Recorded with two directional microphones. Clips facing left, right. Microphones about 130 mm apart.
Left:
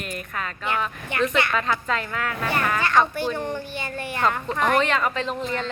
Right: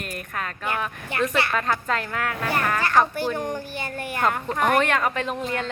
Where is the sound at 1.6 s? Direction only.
50° right (ahead or behind).